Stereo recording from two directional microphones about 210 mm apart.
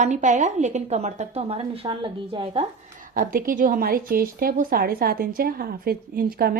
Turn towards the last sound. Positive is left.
turn(degrees=-45)  # may be behind; listen again after turning